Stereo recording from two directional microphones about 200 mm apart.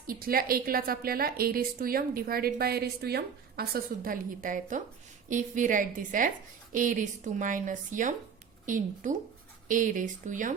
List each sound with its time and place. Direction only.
0.1 s a woman's voice: 45° right (ahead or behind)